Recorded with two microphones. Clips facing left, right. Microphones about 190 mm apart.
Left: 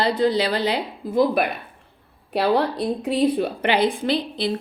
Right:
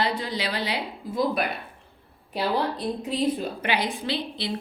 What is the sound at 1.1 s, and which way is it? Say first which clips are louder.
Speech: left 6 dB; 60° left (ahead or behind).